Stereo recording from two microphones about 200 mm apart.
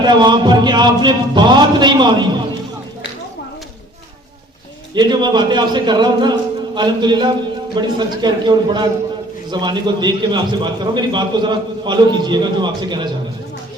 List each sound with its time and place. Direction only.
0.0 s a man's voice: 20° right (ahead or behind)
4.9 s a man's voice: 20° right (ahead or behind)